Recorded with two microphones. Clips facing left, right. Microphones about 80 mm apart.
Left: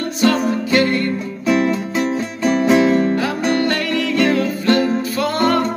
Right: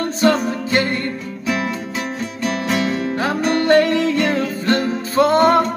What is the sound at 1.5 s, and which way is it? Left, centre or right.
Music, centre.